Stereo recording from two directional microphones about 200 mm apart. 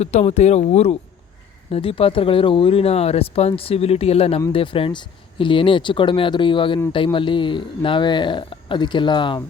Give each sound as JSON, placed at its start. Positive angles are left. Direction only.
{"t": 0.0, "sound": "speech", "side_deg": 35}